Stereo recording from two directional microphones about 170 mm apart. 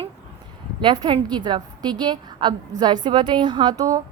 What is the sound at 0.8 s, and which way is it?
A woman's voice, 30° right (ahead or behind).